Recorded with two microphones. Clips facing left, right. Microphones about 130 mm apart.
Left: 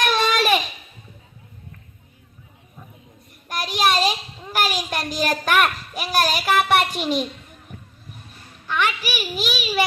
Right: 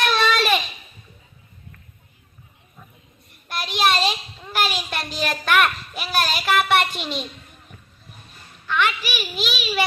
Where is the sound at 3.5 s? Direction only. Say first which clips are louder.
Even; 45° left (ahead or behind).